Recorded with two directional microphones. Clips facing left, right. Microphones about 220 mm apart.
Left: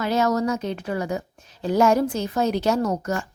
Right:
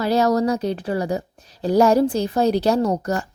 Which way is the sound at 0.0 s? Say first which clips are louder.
Right 3 dB; 35° right (ahead or behind).